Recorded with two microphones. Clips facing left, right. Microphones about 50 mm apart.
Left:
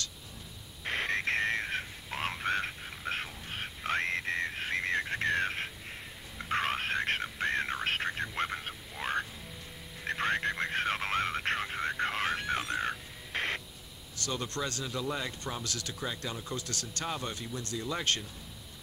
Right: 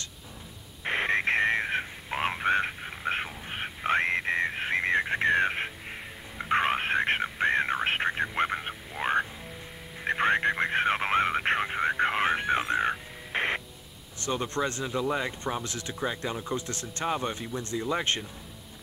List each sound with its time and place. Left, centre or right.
0.8 s a sound: right
10.0 s radio: right
14.2 s speech: right